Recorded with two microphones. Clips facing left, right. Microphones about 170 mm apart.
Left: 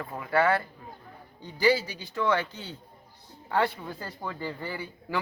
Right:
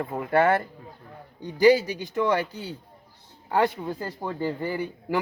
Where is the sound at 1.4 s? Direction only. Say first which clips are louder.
Right 6 dB; 15° right (ahead or behind).